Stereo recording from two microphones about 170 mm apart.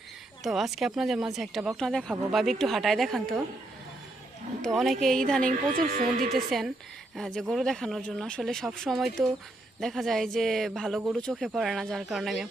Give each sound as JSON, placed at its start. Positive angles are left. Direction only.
{"t": 0.4, "sound": "speech", "side_deg": 0}
{"t": 4.6, "sound": "speech", "side_deg": 0}
{"t": 5.5, "sound": "speech", "side_deg": -55}
{"t": 6.2, "sound": "speech", "side_deg": 0}